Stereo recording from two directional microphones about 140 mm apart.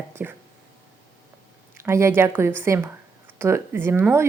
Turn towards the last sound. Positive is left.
turn(degrees=-15)  # may be behind; listen again after turning